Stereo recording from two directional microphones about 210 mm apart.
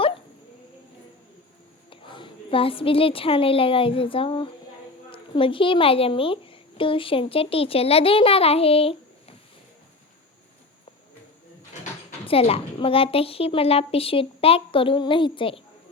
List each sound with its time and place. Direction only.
1.9 s a woman's voice: 25° left (ahead or behind)
12.2 s a woman's voice: 30° left (ahead or behind)